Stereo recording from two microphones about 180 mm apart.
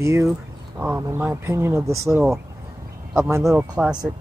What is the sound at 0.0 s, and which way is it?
Speech, 15° right (ahead or behind).